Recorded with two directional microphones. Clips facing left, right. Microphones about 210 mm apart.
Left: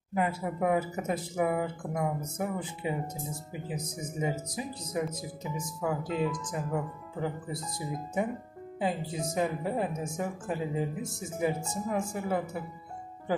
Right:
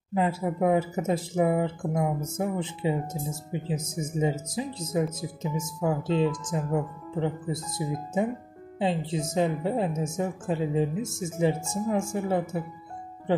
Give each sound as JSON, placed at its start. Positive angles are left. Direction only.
{"t": 0.1, "sound": "speech", "side_deg": -25}